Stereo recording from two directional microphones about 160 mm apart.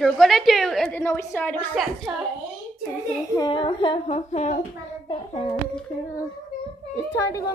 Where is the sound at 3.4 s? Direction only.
30° left (ahead or behind).